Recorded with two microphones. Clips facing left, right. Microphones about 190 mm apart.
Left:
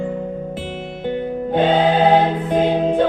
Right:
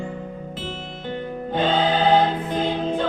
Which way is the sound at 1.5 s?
65° left (ahead or behind).